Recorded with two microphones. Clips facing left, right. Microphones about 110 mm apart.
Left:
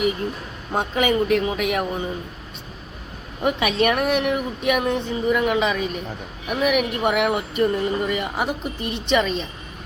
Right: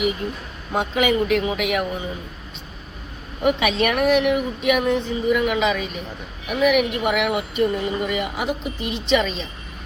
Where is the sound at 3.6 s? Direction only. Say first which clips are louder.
Left 1 dB; 35° left (ahead or behind).